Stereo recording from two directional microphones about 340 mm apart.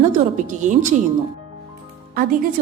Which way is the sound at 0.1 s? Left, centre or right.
Right.